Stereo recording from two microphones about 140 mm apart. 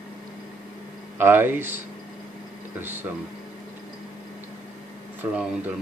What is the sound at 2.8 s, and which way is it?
Speech, 15° right (ahead or behind).